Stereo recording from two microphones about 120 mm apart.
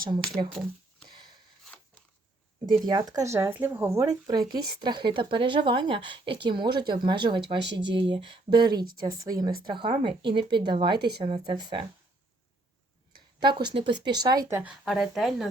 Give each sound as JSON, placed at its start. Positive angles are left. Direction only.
{"t": 0.2, "sound": "speech", "side_deg": 5}
{"t": 1.0, "sound": "a sound", "side_deg": -40}
{"t": 2.6, "sound": "speech", "side_deg": -40}
{"t": 4.3, "sound": "speech", "side_deg": -35}
{"t": 13.1, "sound": "speech", "side_deg": -40}
{"t": 14.6, "sound": "speech", "side_deg": -5}